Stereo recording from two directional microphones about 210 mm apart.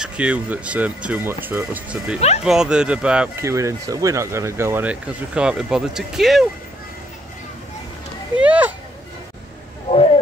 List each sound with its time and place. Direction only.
0.0 s speech: 5° right (ahead or behind)
2.1 s speech: 30° left (ahead or behind)
2.4 s speech: 5° right (ahead or behind)
8.4 s a sound: 5° right (ahead or behind)